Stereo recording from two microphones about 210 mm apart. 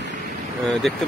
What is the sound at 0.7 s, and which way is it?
Speech, centre (ahead or behind).